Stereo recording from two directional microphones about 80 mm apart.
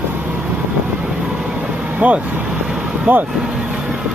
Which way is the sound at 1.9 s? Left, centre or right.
Right.